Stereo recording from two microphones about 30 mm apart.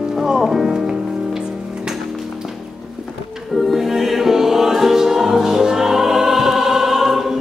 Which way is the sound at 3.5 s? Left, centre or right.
Centre.